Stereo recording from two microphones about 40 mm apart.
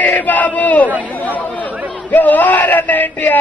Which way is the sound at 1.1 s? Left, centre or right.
Left.